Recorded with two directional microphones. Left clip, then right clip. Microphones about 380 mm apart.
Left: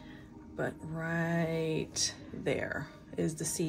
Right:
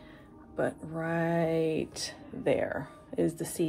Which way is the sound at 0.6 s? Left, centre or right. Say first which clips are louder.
Right 5 dB; centre.